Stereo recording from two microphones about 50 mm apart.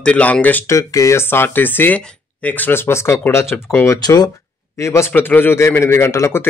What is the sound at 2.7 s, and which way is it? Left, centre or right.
Speech, left.